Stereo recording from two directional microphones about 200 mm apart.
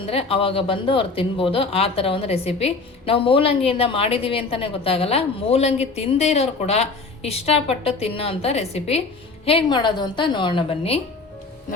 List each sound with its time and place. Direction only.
0.1 s speech: 30° left (ahead or behind)